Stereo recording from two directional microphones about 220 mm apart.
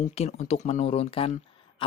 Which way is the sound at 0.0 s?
30° left (ahead or behind).